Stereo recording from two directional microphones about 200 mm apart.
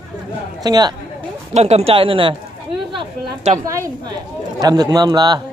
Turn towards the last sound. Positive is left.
turn(degrees=-20)  # may be behind; listen again after turning